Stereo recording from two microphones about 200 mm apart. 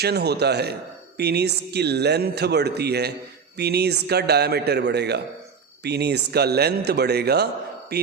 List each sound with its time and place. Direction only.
0.0 s a man's voice: 55° right (ahead or behind)